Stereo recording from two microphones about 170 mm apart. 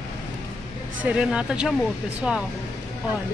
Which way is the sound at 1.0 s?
5° right (ahead or behind).